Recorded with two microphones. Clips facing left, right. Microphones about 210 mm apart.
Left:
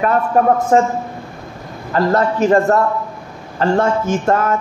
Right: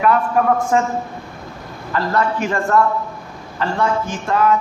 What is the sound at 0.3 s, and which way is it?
A man's voice, 40° left (ahead or behind).